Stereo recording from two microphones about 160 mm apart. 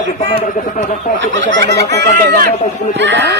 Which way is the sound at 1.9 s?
90° right.